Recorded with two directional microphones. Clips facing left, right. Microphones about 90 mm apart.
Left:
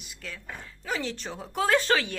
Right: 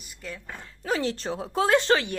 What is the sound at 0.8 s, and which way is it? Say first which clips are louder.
Speech: right 5 dB; 40° right (ahead or behind).